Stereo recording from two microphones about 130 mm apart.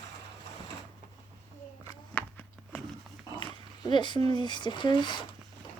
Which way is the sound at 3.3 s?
35° left (ahead or behind).